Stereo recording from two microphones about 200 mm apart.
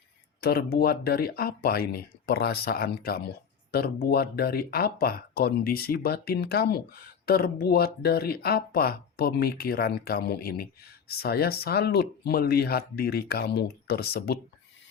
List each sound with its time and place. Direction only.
0.4 s speech: 50° left (ahead or behind)